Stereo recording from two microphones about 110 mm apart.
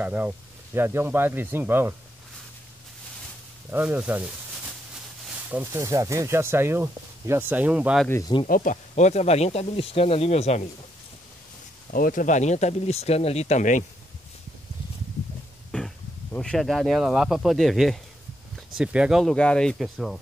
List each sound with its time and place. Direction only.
0.0 s speech: 15° right (ahead or behind)
3.7 s a sound: 15° right (ahead or behind)
5.7 s speech: 25° right (ahead or behind)
8.3 s speech: 40° left (ahead or behind)
8.9 s speech: 90° left
12.4 s speech: 90° left
15.7 s speech: 5° left (ahead or behind)